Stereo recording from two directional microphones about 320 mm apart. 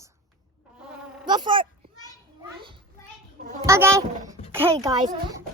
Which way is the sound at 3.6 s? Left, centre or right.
Centre.